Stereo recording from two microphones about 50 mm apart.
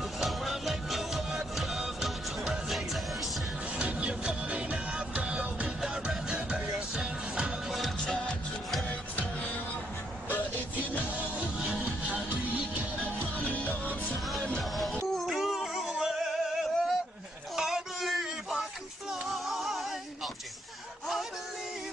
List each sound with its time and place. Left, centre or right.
0.2 s music: centre
3.7 s music: right
8.0 s music: centre
10.8 s music: right
13.0 s music: left
14.6 s music: centre
17.6 s a sound: centre
19.3 s music: centre